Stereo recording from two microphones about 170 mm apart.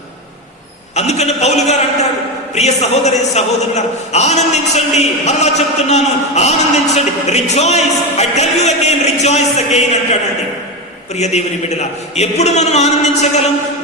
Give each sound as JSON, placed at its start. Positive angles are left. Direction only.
{"t": 0.9, "sound": "a man's voice", "side_deg": 40}